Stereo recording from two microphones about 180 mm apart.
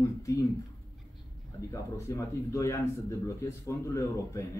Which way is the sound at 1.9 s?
15° left (ahead or behind).